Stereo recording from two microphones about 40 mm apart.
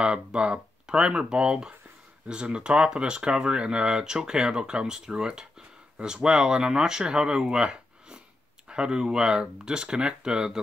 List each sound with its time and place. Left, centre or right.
0.0 s speech: right